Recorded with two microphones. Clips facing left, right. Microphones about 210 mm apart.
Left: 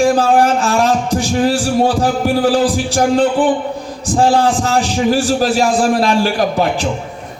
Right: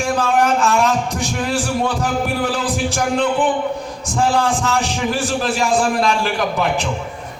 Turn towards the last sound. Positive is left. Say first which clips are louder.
# left 4 dB
turn(degrees=35)  # may be behind; listen again after turning